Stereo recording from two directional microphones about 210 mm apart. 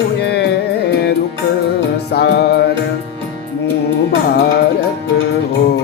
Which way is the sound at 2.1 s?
50° left (ahead or behind).